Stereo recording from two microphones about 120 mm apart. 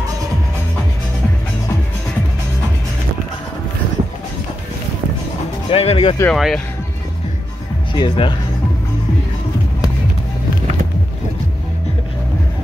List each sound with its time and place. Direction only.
5.7 s music: 55° left (ahead or behind)
6.3 s speech: centre (ahead or behind)
7.9 s speech: 40° left (ahead or behind)